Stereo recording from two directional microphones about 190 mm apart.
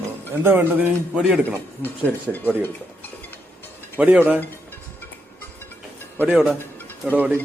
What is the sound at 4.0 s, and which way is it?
Speech, 10° right (ahead or behind).